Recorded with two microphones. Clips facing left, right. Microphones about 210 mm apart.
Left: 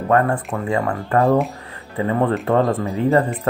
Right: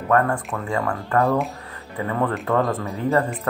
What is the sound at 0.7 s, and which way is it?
Speech, 20° left (ahead or behind).